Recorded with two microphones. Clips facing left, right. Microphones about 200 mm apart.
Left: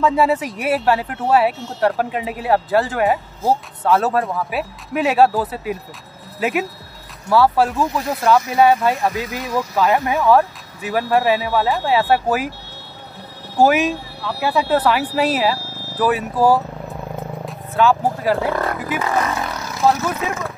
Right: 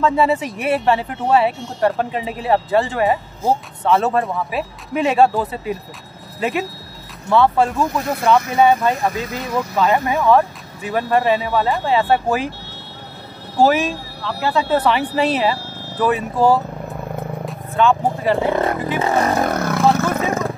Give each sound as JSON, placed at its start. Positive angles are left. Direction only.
{"t": 0.0, "sound": "speech", "side_deg": 5}
{"t": 13.6, "sound": "speech", "side_deg": 10}
{"t": 18.9, "sound": "speech", "side_deg": -30}
{"t": 19.3, "sound": "vehicle", "side_deg": -50}